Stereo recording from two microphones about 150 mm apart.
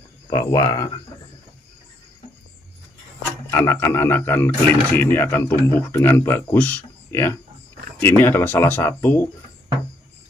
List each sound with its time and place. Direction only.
0.3 s speech: 25° left (ahead or behind)
3.4 s speech: 15° left (ahead or behind)